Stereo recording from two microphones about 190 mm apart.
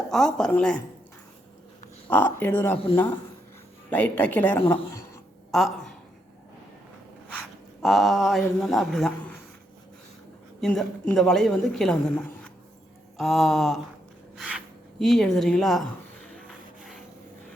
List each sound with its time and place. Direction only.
0.1 s a woman's voice: 5° left (ahead or behind)
2.0 s speech: 10° left (ahead or behind)
3.8 s speech: 10° left (ahead or behind)
5.5 s speech: centre (ahead or behind)
7.3 s dog: centre (ahead or behind)
8.4 s a woman's voice: centre (ahead or behind)
10.6 s a woman's voice: 5° left (ahead or behind)
14.9 s a sound: centre (ahead or behind)